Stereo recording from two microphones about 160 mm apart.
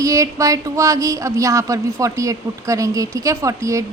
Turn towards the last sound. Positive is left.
turn(degrees=-20)  # may be behind; listen again after turning